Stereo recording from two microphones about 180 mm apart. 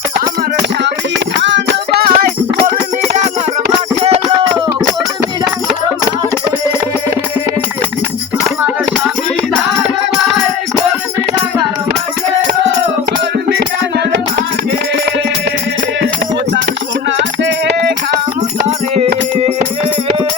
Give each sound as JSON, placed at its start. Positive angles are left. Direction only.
{"t": 1.4, "sound": "music", "side_deg": -80}
{"t": 17.2, "sound": "music", "side_deg": -75}